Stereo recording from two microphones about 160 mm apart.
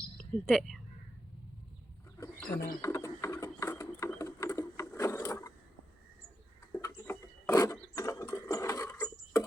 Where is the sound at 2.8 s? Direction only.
20° left (ahead or behind).